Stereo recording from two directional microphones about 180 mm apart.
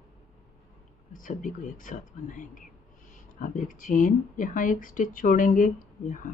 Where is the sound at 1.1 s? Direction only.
45° left (ahead or behind).